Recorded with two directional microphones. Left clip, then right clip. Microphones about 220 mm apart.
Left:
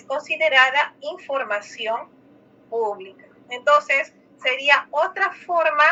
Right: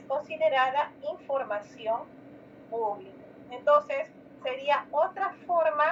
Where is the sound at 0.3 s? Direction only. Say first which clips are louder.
Left 9 dB; 45° left (ahead or behind).